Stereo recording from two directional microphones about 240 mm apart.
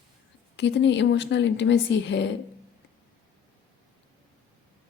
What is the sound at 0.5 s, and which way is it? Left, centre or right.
A woman's voice, left.